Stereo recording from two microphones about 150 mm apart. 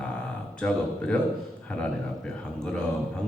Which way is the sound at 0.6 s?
5° left (ahead or behind).